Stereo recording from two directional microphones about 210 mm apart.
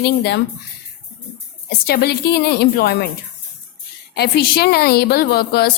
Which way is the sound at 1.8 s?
50° left (ahead or behind).